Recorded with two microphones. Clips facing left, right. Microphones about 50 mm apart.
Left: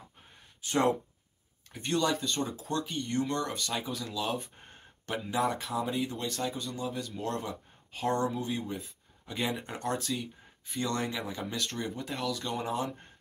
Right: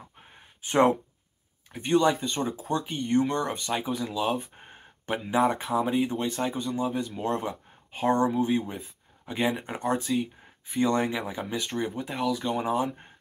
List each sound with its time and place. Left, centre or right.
0.6 s speech: right